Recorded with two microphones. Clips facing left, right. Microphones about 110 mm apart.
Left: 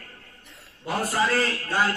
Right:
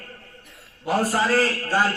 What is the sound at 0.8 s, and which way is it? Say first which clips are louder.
Speech: right 3 dB; 35° right (ahead or behind).